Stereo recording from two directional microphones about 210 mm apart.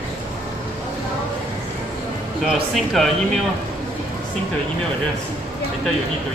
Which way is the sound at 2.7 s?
Centre (ahead or behind).